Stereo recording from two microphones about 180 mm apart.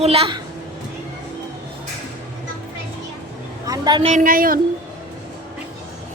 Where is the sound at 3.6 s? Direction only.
20° right (ahead or behind).